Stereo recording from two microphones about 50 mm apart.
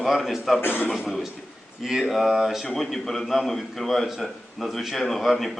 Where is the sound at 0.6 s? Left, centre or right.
Left.